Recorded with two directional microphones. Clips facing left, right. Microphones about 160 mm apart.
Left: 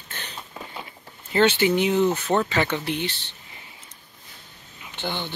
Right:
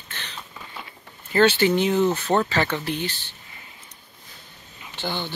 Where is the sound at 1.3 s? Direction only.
15° left (ahead or behind).